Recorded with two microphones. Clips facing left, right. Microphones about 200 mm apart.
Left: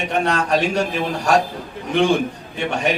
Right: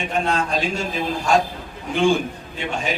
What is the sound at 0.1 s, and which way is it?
Speech, 70° left (ahead or behind).